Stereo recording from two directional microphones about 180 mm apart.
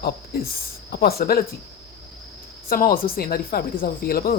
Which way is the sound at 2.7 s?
55° left (ahead or behind).